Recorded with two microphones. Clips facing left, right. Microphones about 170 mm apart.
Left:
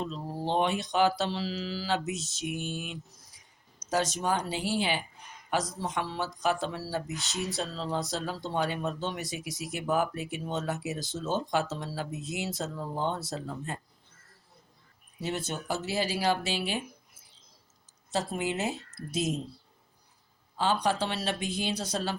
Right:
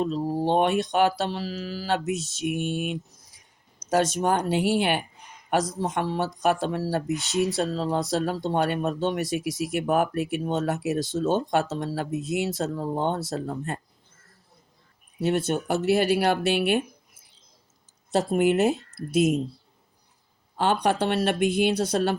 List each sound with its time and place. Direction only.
0.0 s speech: 55° right (ahead or behind)
15.2 s speech: 55° right (ahead or behind)
18.1 s speech: 55° right (ahead or behind)
20.6 s speech: 60° right (ahead or behind)